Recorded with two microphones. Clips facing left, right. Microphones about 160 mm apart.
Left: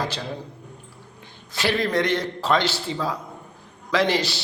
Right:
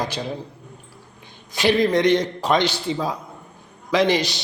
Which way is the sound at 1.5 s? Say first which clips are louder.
Right 5 dB; 15° right (ahead or behind).